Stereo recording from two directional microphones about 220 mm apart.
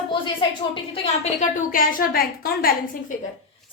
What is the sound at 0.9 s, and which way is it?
A woman's voice, 30° left (ahead or behind).